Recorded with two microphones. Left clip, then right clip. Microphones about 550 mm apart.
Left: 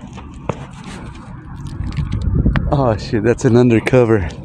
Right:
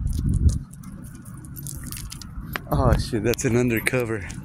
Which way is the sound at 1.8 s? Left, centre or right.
Right.